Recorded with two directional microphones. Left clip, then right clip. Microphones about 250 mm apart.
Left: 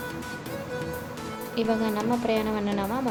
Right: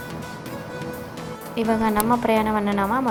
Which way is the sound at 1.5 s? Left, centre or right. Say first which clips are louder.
Right 5 dB; centre.